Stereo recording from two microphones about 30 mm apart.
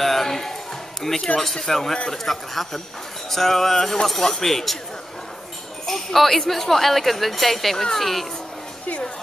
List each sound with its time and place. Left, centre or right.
0.0 s a sound: centre
1.0 s speech: centre
5.9 s jingle bell: centre
6.4 s speech: centre